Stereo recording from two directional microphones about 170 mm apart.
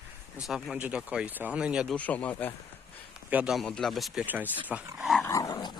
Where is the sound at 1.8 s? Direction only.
10° left (ahead or behind).